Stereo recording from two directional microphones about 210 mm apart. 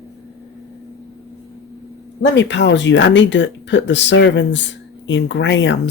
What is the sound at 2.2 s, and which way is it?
Speech, 60° left (ahead or behind).